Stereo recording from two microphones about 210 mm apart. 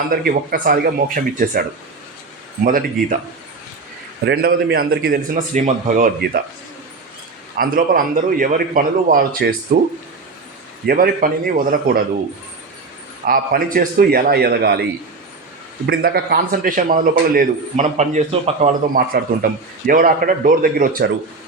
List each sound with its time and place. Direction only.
0.1 s a man's voice: 45° right (ahead or behind)
2.6 s a man's voice: 40° right (ahead or behind)
4.3 s a man's voice: 45° right (ahead or behind)
7.5 s a man's voice: 40° right (ahead or behind)
10.8 s a man's voice: 45° right (ahead or behind)
13.2 s a man's voice: 40° right (ahead or behind)
15.9 s a man's voice: 45° right (ahead or behind); by 18.7 s 30° right (ahead or behind)
18.9 s a man's voice: 45° right (ahead or behind)